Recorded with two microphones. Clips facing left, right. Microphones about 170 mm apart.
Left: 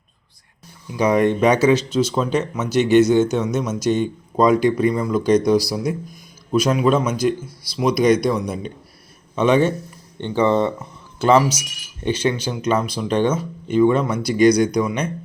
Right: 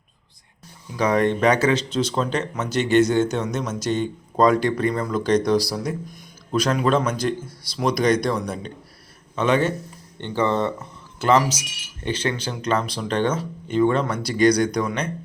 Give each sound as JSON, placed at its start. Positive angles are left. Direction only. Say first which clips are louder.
{"t": 0.9, "sound": "a man's voice", "louder": "left 3 dB", "side_deg": 15}